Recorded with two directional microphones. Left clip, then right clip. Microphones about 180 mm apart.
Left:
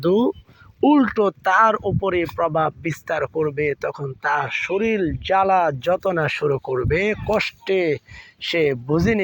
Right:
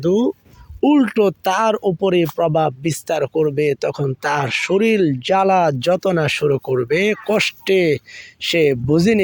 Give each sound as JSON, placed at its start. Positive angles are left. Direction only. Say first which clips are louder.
{"t": 0.0, "sound": "speech", "louder": "right 1 dB", "side_deg": 0}
{"t": 1.0, "sound": "speech", "louder": "right 2 dB", "side_deg": -15}